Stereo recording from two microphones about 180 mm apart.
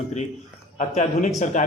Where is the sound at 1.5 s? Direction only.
45° left (ahead or behind).